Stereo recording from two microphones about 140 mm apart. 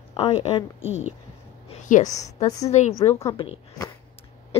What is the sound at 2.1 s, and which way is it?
Speech, 25° left (ahead or behind).